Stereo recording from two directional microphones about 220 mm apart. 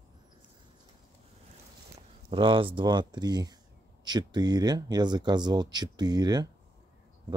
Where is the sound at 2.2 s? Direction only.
25° right (ahead or behind).